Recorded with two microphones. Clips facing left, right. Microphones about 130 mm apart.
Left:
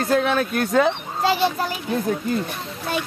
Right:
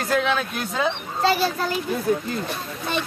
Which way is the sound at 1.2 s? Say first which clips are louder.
Left 1 dB; 20° left (ahead or behind).